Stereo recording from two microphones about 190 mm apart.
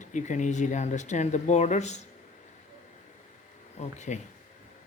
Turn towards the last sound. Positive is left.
turn(degrees=40)  # may be behind; listen again after turning